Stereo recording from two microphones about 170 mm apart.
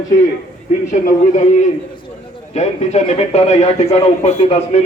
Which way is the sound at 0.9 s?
45° left (ahead or behind).